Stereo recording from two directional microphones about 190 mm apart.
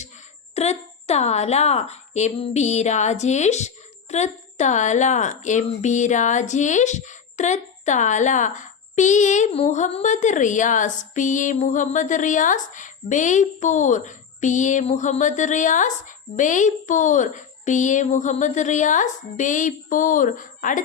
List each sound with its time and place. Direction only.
0.5 s a woman's voice: 35° left (ahead or behind)